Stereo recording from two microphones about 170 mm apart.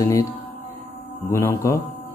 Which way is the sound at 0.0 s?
20° left (ahead or behind).